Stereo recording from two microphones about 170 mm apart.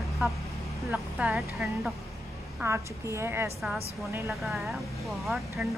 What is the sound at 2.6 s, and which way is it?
Speech, 15° right (ahead or behind).